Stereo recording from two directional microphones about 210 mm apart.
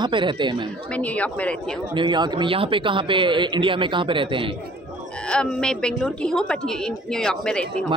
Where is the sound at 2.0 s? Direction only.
20° right (ahead or behind).